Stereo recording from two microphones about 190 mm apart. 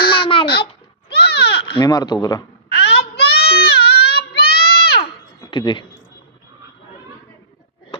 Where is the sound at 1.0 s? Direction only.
60° left (ahead or behind).